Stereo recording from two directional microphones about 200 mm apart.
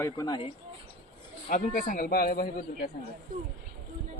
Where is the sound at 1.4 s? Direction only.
40° left (ahead or behind).